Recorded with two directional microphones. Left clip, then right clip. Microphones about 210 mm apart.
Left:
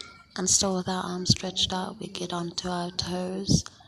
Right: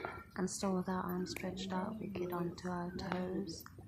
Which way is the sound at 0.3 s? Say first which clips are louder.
Left 14 dB; 35° left (ahead or behind).